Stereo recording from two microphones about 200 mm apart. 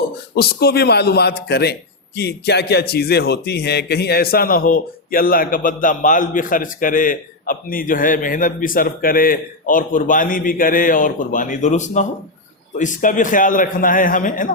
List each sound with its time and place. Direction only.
0.3 s a man's voice: 55° left (ahead or behind)